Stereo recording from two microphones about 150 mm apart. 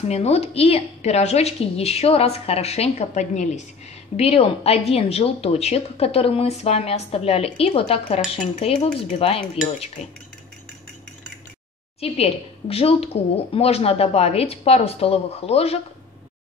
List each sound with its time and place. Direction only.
0.1 s a woman's voice: 45° left (ahead or behind)
12.0 s speech: 40° left (ahead or behind)